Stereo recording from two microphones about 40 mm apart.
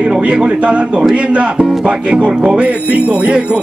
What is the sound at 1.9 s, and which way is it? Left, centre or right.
Speech, right.